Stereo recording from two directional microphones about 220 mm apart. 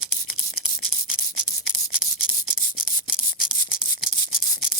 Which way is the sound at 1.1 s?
65° left (ahead or behind).